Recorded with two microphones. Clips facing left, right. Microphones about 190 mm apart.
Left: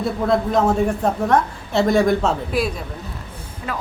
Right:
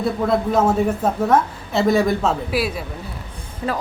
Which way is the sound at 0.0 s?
Centre (ahead or behind).